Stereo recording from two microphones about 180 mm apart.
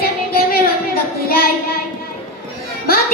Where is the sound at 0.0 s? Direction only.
55° left (ahead or behind).